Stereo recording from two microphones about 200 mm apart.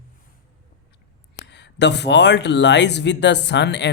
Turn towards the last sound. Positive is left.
turn(degrees=60)  # may be behind; listen again after turning